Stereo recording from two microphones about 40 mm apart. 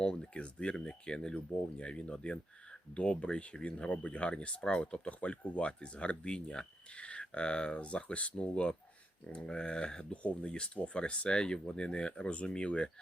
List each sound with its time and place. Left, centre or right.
0.0 s speech: left